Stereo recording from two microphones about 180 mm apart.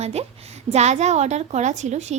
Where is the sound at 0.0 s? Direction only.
35° right (ahead or behind).